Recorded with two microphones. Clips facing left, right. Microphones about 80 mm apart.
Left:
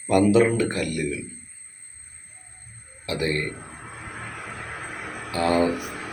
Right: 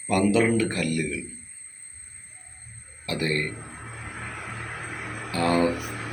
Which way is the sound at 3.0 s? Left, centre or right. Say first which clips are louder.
Left 1 dB; centre.